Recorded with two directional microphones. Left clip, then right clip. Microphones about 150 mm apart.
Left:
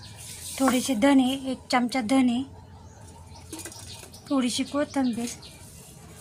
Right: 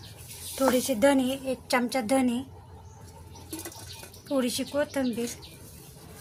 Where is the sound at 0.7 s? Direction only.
20° right (ahead or behind).